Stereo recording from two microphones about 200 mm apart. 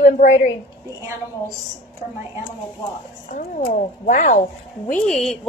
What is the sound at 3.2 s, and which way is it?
Speech, 40° left (ahead or behind).